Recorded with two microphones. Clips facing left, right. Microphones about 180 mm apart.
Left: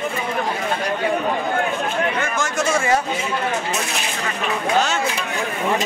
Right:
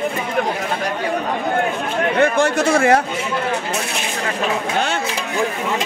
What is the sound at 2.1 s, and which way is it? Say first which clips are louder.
Speech: right 7 dB; 60° right (ahead or behind).